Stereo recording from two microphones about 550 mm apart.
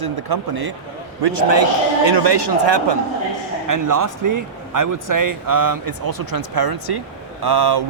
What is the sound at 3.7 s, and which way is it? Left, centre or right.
Speech, right.